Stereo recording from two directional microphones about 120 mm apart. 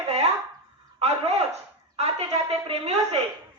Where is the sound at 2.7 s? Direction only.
55° right (ahead or behind).